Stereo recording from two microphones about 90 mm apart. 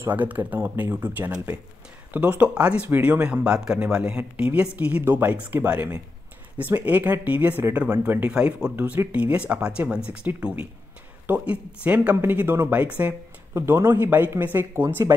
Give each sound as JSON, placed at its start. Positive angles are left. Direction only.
{"t": 0.0, "sound": "speech", "side_deg": -20}
{"t": 8.7, "sound": "speech", "side_deg": -20}
{"t": 13.6, "sound": "speech", "side_deg": -30}